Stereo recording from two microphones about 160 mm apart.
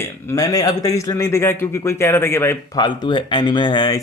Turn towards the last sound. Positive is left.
turn(degrees=25)  # may be behind; listen again after turning